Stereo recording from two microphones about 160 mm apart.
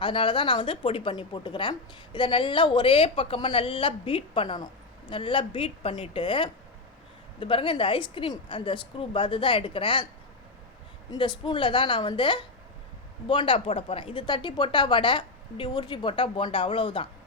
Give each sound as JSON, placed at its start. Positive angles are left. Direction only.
{"t": 0.0, "sound": "a woman's voice", "side_deg": 30}
{"t": 11.1, "sound": "a woman's voice", "side_deg": 30}